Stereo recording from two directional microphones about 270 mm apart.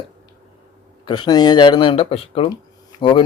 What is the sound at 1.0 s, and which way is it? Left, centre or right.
Speech, centre.